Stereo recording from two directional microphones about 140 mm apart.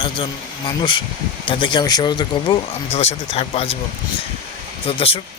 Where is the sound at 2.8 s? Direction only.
50° left (ahead or behind).